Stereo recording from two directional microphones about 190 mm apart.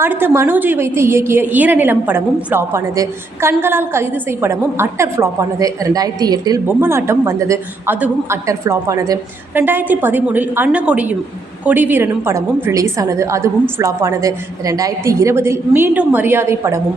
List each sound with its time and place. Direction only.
0.0 s a woman's voice: 10° right (ahead or behind)